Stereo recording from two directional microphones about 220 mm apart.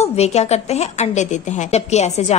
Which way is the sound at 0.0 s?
30° left (ahead or behind).